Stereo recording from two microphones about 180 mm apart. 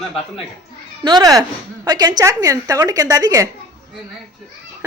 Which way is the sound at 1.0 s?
20° right (ahead or behind).